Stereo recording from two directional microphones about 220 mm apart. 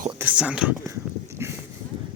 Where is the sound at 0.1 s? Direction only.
10° right (ahead or behind).